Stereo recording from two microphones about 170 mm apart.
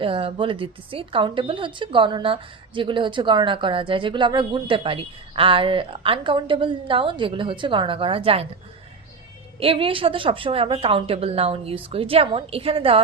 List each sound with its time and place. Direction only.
0.0 s speech: 30° right (ahead or behind)
9.6 s a woman's voice: 30° right (ahead or behind)